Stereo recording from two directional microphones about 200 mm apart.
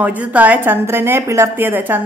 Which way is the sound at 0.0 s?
5° right (ahead or behind).